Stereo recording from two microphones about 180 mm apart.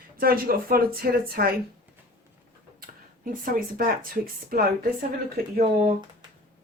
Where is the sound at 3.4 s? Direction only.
50° right (ahead or behind).